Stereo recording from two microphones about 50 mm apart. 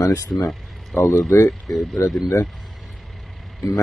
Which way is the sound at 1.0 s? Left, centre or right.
Left.